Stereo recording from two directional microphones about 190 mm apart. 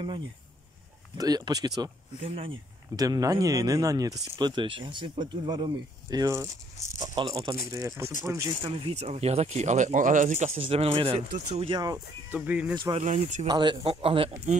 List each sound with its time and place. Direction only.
1.1 s speech: 20° right (ahead or behind)
8.6 s speech: 30° right (ahead or behind)
12.3 s speech: 5° right (ahead or behind)
12.7 s speech: 25° right (ahead or behind)
13.0 s speech: 40° right (ahead or behind)
13.5 s speech: 25° right (ahead or behind)